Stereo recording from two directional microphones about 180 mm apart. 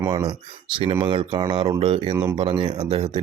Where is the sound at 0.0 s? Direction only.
20° right (ahead or behind).